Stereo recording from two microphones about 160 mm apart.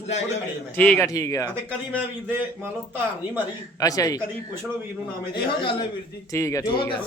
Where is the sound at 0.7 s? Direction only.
5° left (ahead or behind).